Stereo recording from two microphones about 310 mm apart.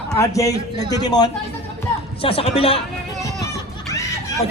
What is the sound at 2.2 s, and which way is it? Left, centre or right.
Speech, centre.